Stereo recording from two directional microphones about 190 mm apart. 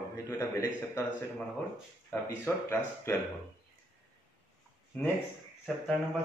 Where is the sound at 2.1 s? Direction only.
15° left (ahead or behind).